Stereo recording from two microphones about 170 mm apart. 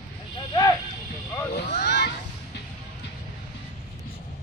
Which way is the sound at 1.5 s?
70° left (ahead or behind).